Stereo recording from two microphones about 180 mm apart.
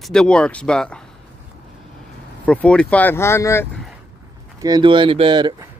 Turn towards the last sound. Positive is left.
turn(degrees=-25)  # may be behind; listen again after turning